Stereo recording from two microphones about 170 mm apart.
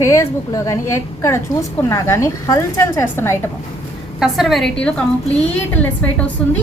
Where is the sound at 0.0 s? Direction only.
20° left (ahead or behind).